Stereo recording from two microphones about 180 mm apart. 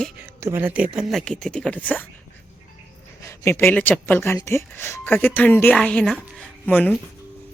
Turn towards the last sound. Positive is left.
turn(degrees=5)  # may be behind; listen again after turning